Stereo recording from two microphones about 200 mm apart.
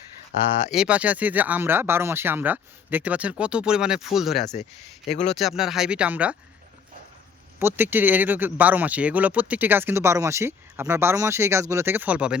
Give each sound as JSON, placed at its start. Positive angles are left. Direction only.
{"t": 0.7, "sound": "speech", "side_deg": -5}
{"t": 5.0, "sound": "speech", "side_deg": 35}
{"t": 5.3, "sound": "speech", "side_deg": 0}
{"t": 7.6, "sound": "speech", "side_deg": -10}